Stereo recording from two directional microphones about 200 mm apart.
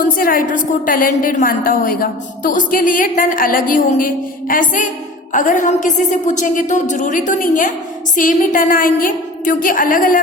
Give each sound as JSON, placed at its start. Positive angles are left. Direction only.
{"t": 0.0, "sound": "a woman's voice", "side_deg": 45}